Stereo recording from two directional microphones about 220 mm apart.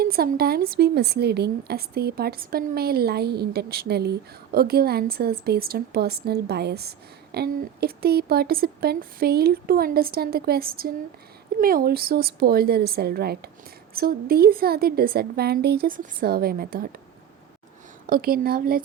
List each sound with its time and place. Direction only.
0.0 s a woman's voice: 45° right (ahead or behind)
18.0 s a woman's voice: 40° right (ahead or behind)